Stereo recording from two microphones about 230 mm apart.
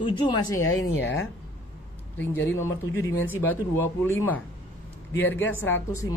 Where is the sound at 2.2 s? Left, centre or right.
Centre.